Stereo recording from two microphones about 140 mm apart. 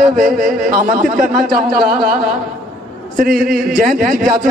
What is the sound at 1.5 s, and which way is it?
A man's voice, 90° right.